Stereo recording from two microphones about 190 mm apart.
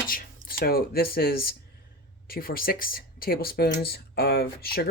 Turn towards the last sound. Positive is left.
turn(degrees=55)  # may be behind; listen again after turning